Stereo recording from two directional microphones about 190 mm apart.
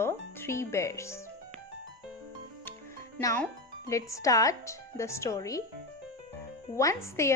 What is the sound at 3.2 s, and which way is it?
Speech, 5° left (ahead or behind).